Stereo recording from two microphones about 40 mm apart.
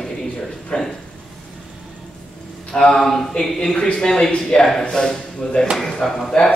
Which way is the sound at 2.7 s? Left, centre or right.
Centre.